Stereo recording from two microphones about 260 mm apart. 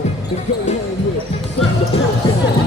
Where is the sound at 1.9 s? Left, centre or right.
Left.